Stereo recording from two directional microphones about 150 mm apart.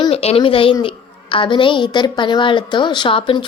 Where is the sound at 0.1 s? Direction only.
40° left (ahead or behind).